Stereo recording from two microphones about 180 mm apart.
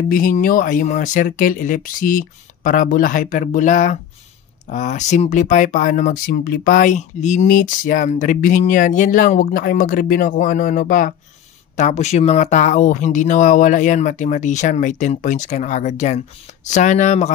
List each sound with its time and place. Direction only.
0.1 s speech: 50° left (ahead or behind)